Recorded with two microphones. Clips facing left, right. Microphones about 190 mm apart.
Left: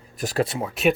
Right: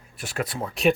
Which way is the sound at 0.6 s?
Centre (ahead or behind).